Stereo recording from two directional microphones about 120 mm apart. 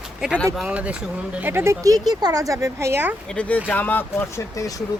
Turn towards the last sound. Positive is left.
turn(degrees=30)  # may be behind; listen again after turning